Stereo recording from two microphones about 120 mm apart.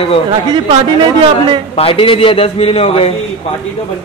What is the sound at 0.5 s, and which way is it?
A man's voice, 40° right (ahead or behind).